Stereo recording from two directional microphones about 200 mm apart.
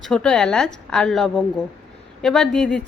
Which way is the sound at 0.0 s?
5° left (ahead or behind).